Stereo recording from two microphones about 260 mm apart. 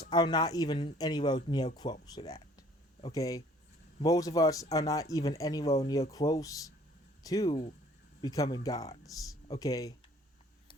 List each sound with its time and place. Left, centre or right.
0.1 s speech: centre